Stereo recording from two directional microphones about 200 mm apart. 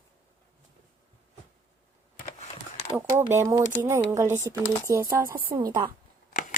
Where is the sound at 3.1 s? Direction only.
15° right (ahead or behind).